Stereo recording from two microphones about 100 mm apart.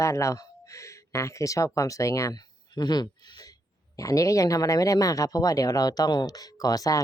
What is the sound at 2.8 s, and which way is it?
Speech, 45° left (ahead or behind).